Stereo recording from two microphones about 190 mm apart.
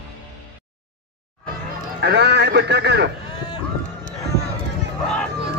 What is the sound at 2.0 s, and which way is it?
A man's voice, 60° right (ahead or behind).